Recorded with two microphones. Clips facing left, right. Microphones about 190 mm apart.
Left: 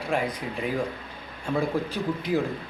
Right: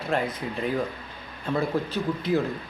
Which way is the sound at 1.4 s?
10° left (ahead or behind).